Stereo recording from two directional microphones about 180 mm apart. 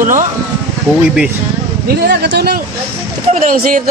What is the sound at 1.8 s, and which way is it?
Speech, 65° right (ahead or behind).